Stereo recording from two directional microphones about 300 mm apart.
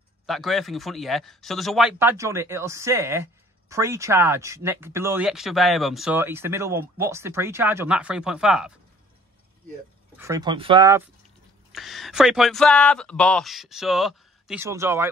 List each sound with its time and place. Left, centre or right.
0.3 s speech: centre
10.1 s speech: centre